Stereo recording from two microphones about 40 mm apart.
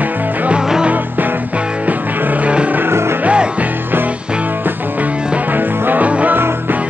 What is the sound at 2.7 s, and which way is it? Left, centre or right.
Music, right.